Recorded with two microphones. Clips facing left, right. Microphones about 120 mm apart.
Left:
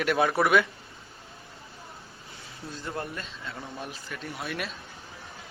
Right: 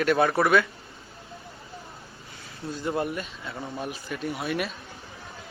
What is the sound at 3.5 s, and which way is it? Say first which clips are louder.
A man's voice: right 4 dB; 5° right (ahead or behind).